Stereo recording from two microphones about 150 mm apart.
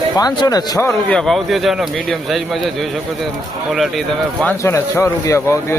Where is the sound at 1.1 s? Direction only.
Centre (ahead or behind).